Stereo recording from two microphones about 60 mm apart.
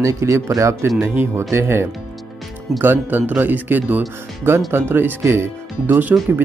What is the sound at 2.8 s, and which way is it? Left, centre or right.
Speech, right.